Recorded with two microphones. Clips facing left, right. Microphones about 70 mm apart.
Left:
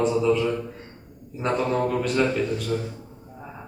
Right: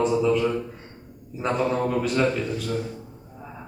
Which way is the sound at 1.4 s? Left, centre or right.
Centre.